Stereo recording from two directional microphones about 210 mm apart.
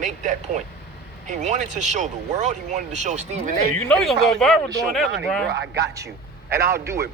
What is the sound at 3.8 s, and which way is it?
Speech, 5° left (ahead or behind).